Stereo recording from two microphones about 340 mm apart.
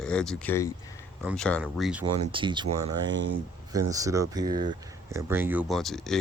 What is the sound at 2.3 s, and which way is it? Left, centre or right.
Speech, centre.